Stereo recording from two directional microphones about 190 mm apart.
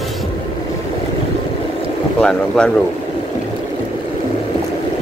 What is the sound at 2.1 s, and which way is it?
Speech, 5° left (ahead or behind).